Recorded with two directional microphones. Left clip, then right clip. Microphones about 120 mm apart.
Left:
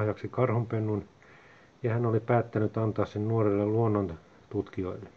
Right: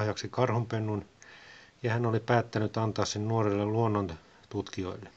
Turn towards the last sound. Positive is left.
turn(degrees=-25)  # may be behind; listen again after turning